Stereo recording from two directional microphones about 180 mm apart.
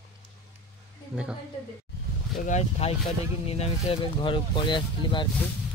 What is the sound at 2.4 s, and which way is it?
Speech, 40° left (ahead or behind).